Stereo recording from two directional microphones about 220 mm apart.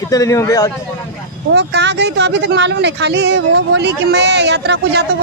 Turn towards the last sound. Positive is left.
turn(degrees=-50)  # may be behind; listen again after turning